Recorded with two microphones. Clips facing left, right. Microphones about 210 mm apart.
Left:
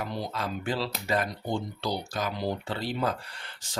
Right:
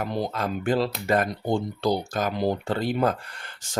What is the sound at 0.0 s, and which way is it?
Speech, 50° right (ahead or behind).